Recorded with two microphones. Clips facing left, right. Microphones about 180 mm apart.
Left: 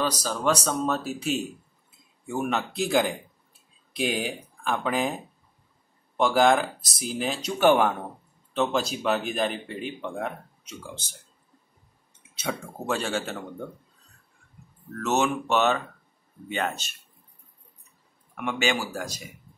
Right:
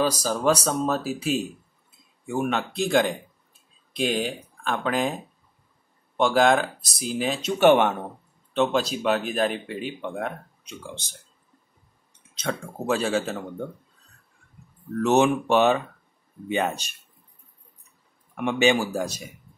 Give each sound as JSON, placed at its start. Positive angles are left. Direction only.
{"t": 0.0, "sound": "speech", "side_deg": -10}
{"t": 12.2, "sound": "speech", "side_deg": 10}
{"t": 15.0, "sound": "speech", "side_deg": -15}
{"t": 18.3, "sound": "speech", "side_deg": -20}